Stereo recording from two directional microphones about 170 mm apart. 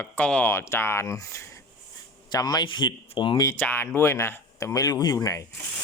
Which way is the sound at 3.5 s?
10° left (ahead or behind).